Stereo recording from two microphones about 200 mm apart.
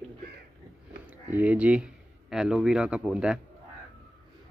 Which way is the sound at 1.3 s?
5° right (ahead or behind).